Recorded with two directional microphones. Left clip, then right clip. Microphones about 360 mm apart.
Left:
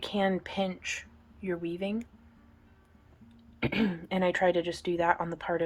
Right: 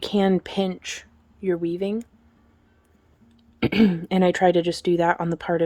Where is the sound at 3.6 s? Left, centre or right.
Right.